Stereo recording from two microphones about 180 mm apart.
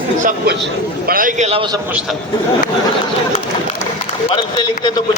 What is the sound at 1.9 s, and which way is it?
Speech, 5° right (ahead or behind).